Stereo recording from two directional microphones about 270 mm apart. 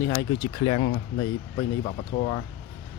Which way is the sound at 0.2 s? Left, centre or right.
Centre.